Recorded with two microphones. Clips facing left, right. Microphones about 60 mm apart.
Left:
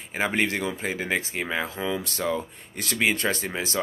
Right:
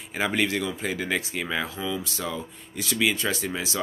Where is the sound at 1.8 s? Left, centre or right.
Left.